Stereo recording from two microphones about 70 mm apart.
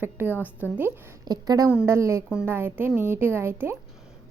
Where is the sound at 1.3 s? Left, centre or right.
Right.